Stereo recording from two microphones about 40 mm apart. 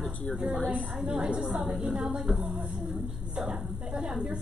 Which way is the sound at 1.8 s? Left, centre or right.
Centre.